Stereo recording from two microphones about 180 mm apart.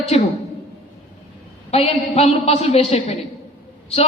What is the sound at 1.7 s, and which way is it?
A woman's voice, 35° left (ahead or behind).